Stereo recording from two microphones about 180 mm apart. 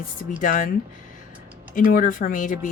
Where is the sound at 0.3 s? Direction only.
45° left (ahead or behind).